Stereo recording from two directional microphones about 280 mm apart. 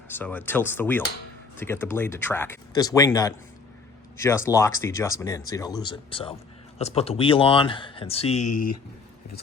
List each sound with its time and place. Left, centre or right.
0.1 s speech: centre